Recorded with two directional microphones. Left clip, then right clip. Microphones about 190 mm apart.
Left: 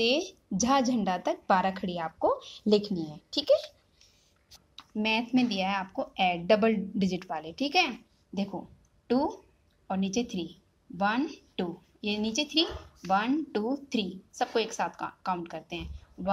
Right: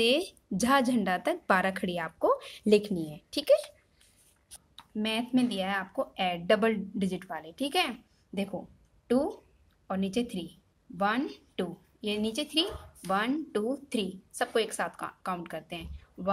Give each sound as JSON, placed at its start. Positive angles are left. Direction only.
{"t": 0.0, "sound": "a woman's voice", "side_deg": -20}
{"t": 4.7, "sound": "speech", "side_deg": 5}
{"t": 9.0, "sound": "a woman's voice", "side_deg": -10}